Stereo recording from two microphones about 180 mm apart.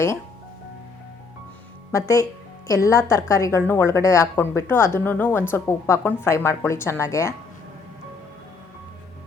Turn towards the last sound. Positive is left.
turn(degrees=15)  # may be behind; listen again after turning